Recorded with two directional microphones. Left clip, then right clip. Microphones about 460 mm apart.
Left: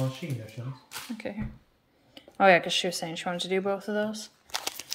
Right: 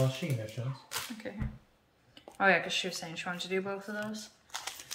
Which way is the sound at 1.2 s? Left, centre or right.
Centre.